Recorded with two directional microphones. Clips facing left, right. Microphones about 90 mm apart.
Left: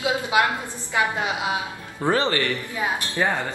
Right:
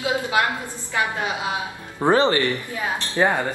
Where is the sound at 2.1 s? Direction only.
20° right (ahead or behind).